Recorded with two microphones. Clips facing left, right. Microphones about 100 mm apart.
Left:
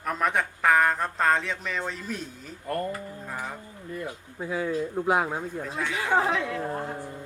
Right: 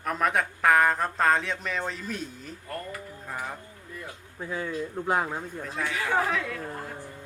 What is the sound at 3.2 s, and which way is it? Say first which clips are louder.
Music: right 2 dB; centre (ahead or behind).